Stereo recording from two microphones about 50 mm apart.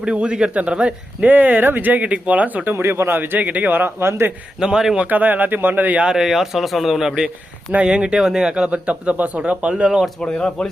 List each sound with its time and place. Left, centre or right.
0.0 s speech: right
1.3 s speech: right
2.7 s speech: right
3.2 s speech: right
4.6 s speech: centre
5.0 s speech: right
6.0 s speech: centre
7.7 s speech: right
8.9 s speech: right
10.2 s speech: centre